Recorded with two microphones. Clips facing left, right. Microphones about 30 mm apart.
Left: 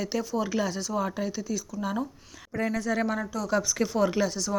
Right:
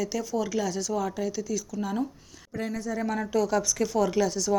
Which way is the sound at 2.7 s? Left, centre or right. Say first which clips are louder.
Left 4 dB; left.